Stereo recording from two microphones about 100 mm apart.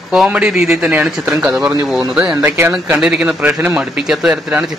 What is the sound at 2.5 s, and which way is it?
Speech, 25° right (ahead or behind).